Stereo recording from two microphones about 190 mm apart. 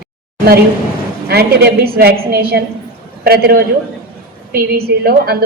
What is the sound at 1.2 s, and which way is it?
A woman's voice, 55° right (ahead or behind).